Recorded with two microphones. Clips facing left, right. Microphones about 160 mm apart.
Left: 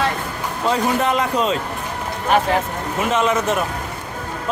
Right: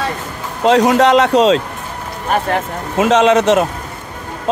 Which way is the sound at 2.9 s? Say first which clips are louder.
Right 8 dB; 90° right.